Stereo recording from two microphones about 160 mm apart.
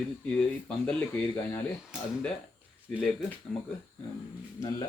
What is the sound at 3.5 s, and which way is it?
Speech, 5° left (ahead or behind).